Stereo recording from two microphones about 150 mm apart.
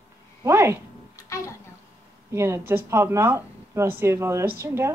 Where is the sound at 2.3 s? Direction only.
20° right (ahead or behind).